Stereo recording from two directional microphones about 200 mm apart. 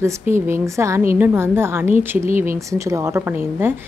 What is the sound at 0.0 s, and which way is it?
A woman's voice, 10° right (ahead or behind).